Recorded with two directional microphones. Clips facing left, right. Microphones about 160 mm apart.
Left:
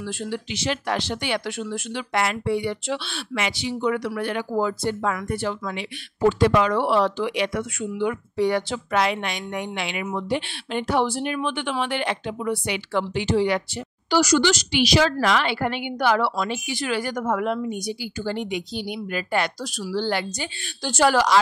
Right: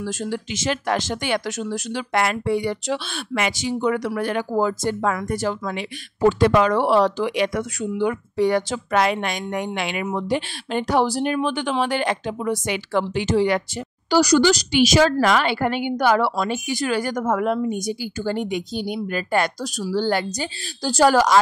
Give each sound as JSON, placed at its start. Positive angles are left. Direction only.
{"t": 0.0, "sound": "speech", "side_deg": -45}